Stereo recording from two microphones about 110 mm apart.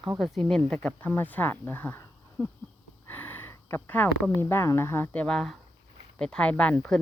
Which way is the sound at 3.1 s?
15° left (ahead or behind).